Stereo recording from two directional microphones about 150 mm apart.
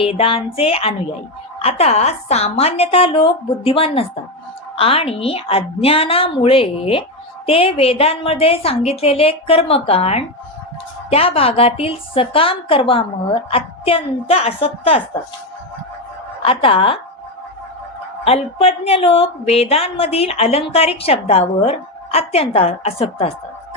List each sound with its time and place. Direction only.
0.0 s a woman's voice: 40° left (ahead or behind)
16.4 s a woman's voice: 35° left (ahead or behind)
18.3 s a woman's voice: 45° left (ahead or behind)